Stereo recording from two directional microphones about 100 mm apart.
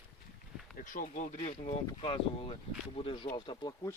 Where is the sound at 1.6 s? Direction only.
70° left (ahead or behind); by 3.8 s 50° left (ahead or behind).